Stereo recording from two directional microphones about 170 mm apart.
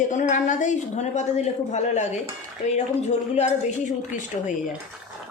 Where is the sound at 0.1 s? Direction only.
45° left (ahead or behind).